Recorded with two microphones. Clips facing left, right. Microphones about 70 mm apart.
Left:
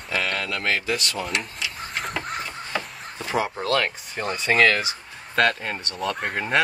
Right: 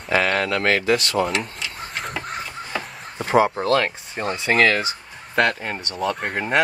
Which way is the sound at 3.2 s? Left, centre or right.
Right.